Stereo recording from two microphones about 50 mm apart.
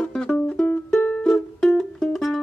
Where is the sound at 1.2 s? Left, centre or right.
Centre.